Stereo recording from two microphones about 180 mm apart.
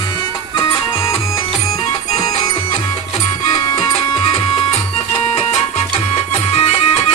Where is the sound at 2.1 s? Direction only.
35° left (ahead or behind).